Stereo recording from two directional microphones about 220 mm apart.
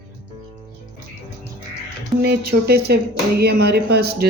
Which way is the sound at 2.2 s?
45° right (ahead or behind).